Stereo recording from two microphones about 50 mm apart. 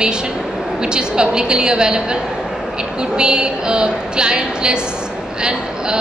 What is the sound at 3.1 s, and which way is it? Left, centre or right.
A woman's voice, centre.